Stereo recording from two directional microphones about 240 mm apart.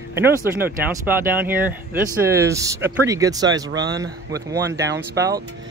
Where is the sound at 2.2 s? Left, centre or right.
Centre.